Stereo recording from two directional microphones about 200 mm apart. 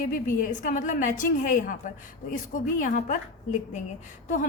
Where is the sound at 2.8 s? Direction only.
40° left (ahead or behind).